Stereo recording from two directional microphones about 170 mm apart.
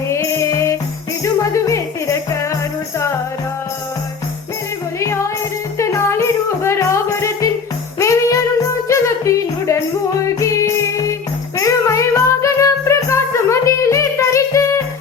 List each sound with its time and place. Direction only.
0.1 s music: 20° left (ahead or behind)
4.9 s music: 15° left (ahead or behind)
8.9 s a sound: 15° left (ahead or behind)
10.2 s music: 20° left (ahead or behind)